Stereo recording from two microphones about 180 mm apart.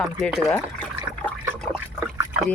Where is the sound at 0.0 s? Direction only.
Centre (ahead or behind).